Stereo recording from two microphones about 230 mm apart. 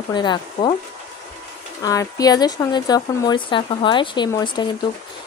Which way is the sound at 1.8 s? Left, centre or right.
Centre.